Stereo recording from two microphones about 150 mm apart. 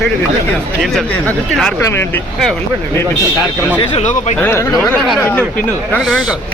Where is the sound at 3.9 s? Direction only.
45° left (ahead or behind).